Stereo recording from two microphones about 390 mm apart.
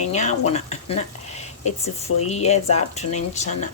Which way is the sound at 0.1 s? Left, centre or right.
Centre.